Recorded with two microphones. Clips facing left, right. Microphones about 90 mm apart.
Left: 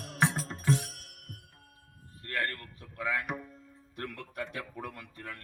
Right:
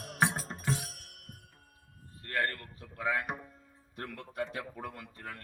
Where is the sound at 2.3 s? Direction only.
25° right (ahead or behind).